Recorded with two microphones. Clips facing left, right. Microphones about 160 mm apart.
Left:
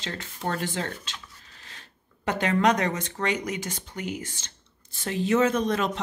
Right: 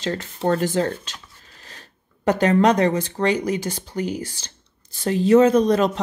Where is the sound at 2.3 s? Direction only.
40° right (ahead or behind).